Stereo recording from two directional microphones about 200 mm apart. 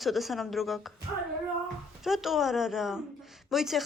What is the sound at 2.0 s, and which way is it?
A woman's voice, centre (ahead or behind).